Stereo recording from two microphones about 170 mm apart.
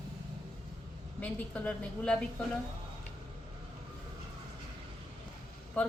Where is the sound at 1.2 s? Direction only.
10° left (ahead or behind).